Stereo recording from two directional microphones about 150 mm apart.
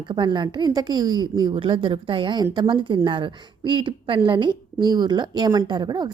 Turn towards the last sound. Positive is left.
turn(degrees=-30)  # may be behind; listen again after turning